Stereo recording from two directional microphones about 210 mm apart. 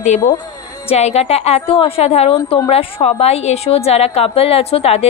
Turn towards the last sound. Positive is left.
turn(degrees=30)  # may be behind; listen again after turning